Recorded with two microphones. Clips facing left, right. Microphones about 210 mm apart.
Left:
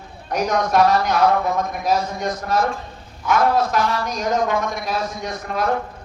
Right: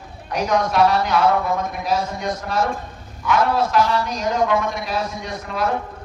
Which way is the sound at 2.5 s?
45° left (ahead or behind).